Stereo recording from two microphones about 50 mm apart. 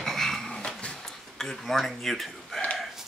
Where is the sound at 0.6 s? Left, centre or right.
Left.